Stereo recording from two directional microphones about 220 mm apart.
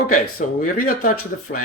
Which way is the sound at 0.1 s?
35° left (ahead or behind).